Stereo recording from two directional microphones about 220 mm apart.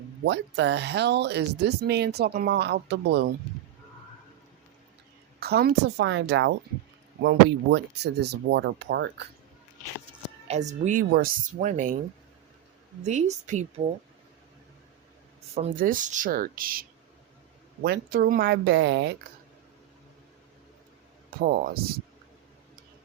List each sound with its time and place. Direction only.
0.3 s speech: 55° right (ahead or behind)
5.4 s speech: 45° right (ahead or behind)
10.5 s speech: 30° right (ahead or behind)
10.8 s speech: 40° right (ahead or behind)
13.1 s speech: 30° right (ahead or behind)
15.5 s speech: 40° right (ahead or behind)
17.8 s speech: 45° right (ahead or behind)
21.2 s speech: 40° right (ahead or behind)